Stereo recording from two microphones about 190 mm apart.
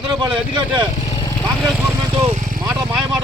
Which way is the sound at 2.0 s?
20° right (ahead or behind).